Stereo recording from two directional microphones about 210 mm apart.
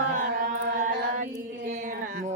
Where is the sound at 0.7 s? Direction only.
40° right (ahead or behind).